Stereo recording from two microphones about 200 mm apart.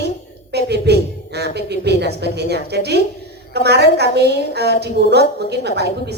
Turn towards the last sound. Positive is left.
turn(degrees=-55)  # may be behind; listen again after turning